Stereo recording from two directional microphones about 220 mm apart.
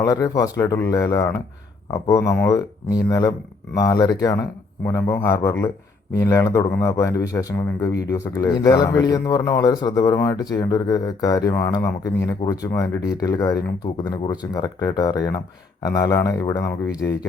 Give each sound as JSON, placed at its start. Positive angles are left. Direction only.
{"t": 0.0, "sound": "speech", "side_deg": 15}